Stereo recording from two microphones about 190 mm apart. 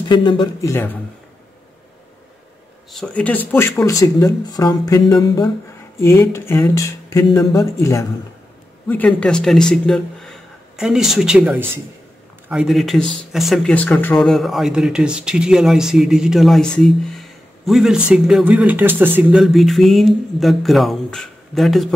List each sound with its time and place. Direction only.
0.1 s speech: 25° left (ahead or behind)
2.9 s speech: 5° left (ahead or behind)